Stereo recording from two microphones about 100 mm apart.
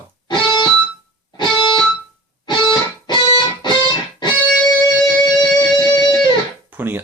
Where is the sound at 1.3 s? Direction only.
55° left (ahead or behind).